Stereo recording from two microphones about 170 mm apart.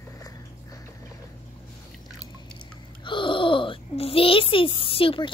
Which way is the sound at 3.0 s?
30° left (ahead or behind).